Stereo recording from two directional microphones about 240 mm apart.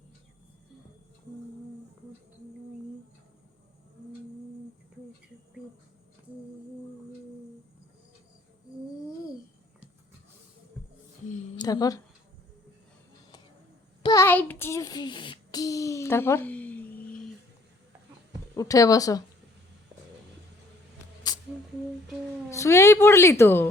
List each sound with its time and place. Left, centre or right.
11.5 s speech: centre
14.0 s child singing: centre
18.5 s a woman's voice: centre
22.4 s a woman's voice: centre